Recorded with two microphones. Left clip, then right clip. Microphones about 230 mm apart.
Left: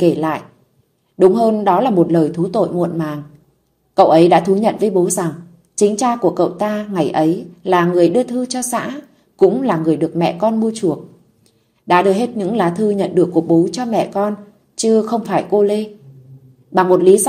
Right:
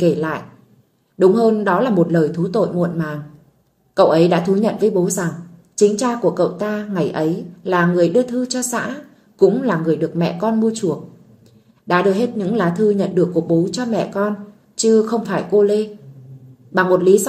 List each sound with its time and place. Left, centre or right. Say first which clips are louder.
0.0 s a woman's voice: left 2 dB; centre
11.9 s a woman's voice: left 3 dB; left